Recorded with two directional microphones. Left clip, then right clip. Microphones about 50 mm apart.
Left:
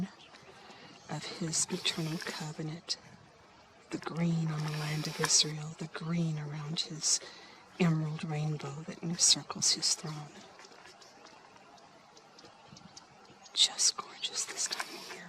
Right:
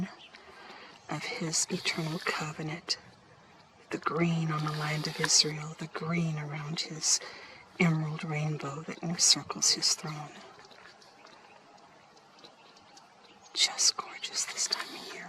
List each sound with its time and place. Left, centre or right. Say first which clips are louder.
0.6 s a woman's voice: right 6 dB; right
6.1 s a woman's voice: right 4 dB; right
13.5 s whispering: right 1 dB; right